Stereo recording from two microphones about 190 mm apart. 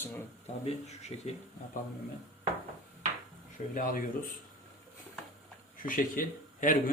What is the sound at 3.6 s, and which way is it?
Speech, 40° left (ahead or behind).